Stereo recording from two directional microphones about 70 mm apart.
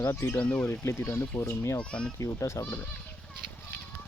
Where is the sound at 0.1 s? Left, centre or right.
Left.